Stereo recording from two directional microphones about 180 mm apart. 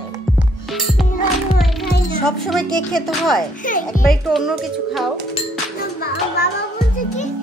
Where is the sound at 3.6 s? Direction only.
50° left (ahead or behind).